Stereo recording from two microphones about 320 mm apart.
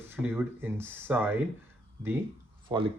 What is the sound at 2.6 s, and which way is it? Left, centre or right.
Speech, centre.